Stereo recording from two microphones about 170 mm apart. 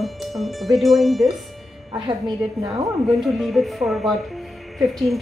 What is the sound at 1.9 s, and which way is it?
Speech, 25° right (ahead or behind).